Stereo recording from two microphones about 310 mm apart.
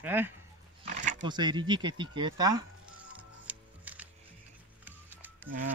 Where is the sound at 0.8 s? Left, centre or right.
Right.